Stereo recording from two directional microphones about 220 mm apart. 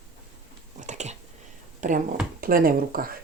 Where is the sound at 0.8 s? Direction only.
30° right (ahead or behind).